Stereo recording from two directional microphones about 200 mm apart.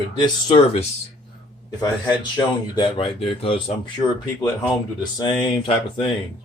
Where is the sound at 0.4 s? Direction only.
30° left (ahead or behind).